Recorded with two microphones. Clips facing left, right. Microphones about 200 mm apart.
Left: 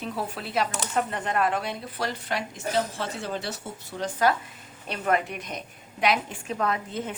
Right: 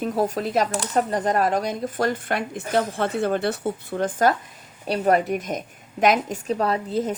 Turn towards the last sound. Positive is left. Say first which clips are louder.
# right 6 dB
turn(degrees=-35)  # may be behind; listen again after turning